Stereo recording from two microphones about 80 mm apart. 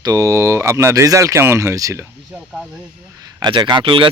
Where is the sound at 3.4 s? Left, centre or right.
Right.